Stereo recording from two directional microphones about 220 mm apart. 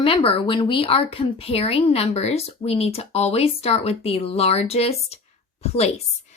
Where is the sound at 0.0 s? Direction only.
25° left (ahead or behind).